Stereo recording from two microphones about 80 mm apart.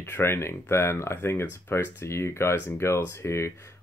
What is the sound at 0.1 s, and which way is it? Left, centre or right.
Speech, left.